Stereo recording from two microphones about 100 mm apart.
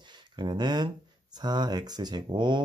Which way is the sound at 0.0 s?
50° right (ahead or behind).